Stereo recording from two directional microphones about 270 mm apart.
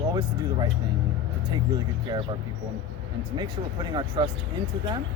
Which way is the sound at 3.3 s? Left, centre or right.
Centre.